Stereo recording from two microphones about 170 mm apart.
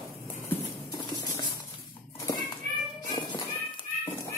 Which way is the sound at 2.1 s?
20° left (ahead or behind).